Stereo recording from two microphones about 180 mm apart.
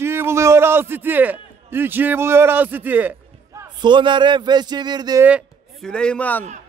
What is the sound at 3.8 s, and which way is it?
Speech, 25° right (ahead or behind).